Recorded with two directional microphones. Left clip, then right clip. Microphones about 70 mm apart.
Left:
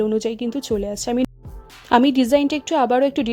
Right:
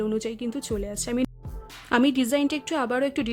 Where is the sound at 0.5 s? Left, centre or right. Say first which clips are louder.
Left 7 dB; left.